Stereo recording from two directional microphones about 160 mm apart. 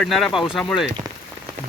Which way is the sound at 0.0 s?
Centre (ahead or behind).